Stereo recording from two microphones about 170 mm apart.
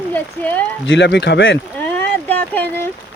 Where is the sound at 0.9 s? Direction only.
90° left.